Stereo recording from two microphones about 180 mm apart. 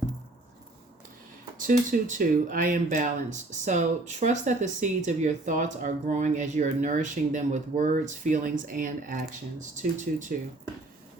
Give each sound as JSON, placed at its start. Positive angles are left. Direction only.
{"t": 1.5, "sound": "speech", "side_deg": -45}